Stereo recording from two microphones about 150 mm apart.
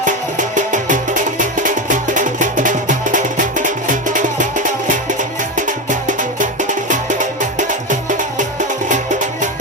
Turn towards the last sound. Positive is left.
turn(degrees=-55)  # may be behind; listen again after turning